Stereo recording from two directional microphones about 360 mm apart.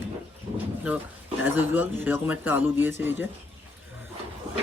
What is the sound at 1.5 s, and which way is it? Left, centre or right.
Speech, centre.